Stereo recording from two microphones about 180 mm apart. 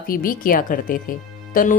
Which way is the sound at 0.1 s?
50° left (ahead or behind).